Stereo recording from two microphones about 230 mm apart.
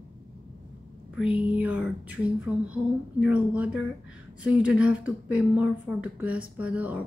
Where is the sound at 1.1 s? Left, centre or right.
Centre.